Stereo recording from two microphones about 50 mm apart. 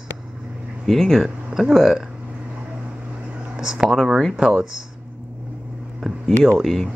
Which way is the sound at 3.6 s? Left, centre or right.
Centre.